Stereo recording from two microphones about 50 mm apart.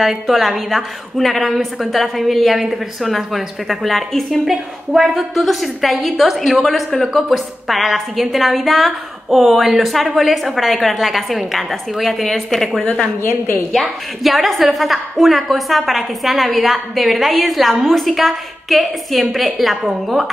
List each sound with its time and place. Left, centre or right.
0.0 s a woman's voice: centre
13.2 s a woman's voice: left
14.2 s a woman's voice: centre